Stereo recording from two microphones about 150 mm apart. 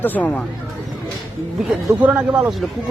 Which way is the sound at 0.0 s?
10° left (ahead or behind).